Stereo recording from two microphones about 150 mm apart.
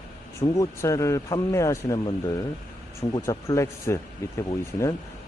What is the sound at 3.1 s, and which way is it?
Speech, 25° left (ahead or behind).